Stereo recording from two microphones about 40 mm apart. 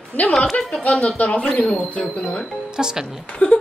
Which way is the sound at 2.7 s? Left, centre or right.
Centre.